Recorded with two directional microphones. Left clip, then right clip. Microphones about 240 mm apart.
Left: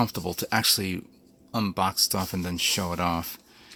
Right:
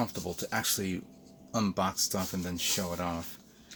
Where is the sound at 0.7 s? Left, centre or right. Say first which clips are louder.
Left 6 dB; left.